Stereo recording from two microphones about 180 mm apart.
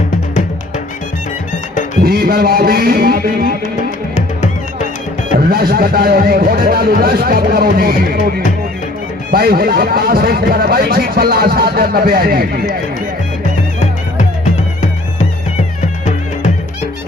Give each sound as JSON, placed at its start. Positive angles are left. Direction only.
{"t": 2.0, "sound": "music", "side_deg": -55}
{"t": 4.1, "sound": "music", "side_deg": 40}
{"t": 5.5, "sound": "speech", "side_deg": -55}
{"t": 9.3, "sound": "speech", "side_deg": -55}